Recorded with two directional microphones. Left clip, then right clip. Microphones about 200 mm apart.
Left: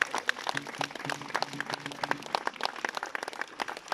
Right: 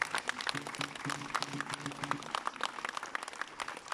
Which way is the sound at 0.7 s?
35° left (ahead or behind).